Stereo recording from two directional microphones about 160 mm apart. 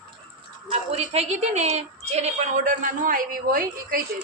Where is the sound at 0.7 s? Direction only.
40° right (ahead or behind); by 4.0 s 60° right (ahead or behind).